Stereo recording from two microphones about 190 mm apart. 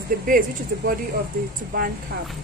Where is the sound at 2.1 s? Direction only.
65° right (ahead or behind).